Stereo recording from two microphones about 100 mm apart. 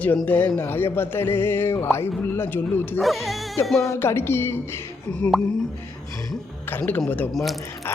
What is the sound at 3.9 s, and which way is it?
A man's voice, 25° left (ahead or behind).